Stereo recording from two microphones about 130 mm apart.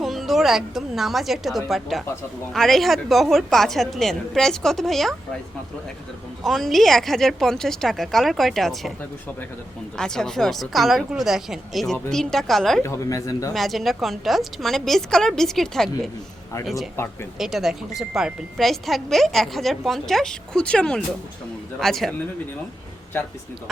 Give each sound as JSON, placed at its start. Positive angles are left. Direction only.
{"t": 0.0, "sound": "a woman's voice", "side_deg": 0}
{"t": 6.4, "sound": "a woman's voice", "side_deg": 0}
{"t": 10.0, "sound": "a woman's voice", "side_deg": 5}
{"t": 12.8, "sound": "speech", "side_deg": 25}
{"t": 13.5, "sound": "a woman's voice", "side_deg": 0}